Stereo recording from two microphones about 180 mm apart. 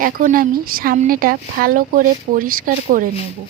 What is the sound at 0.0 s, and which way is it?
Speech, 50° right (ahead or behind).